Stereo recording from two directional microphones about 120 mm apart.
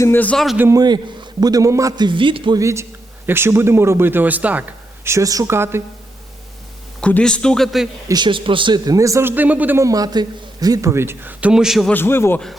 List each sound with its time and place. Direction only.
0.0 s a man's voice: 15° left (ahead or behind)
0.7 s a man's voice: 35° right (ahead or behind)
2.0 s speech: 45° right (ahead or behind)
2.6 s a man's voice: 25° right (ahead or behind)
5.0 s a man's voice: 25° right (ahead or behind)
7.0 s a man's voice: 10° left (ahead or behind)
8.0 s a man's voice: 35° right (ahead or behind); by 9.8 s 15° right (ahead or behind)
9.8 s a man's voice: 30° right (ahead or behind); by 11.9 s 5° right (ahead or behind)
11.9 s a man's voice: 20° left (ahead or behind)